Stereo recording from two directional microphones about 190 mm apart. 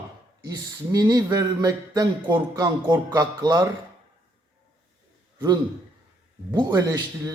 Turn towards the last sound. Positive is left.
turn(degrees=-20)  # may be behind; listen again after turning